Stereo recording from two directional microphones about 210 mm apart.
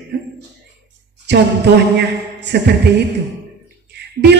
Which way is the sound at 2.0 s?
55° right (ahead or behind).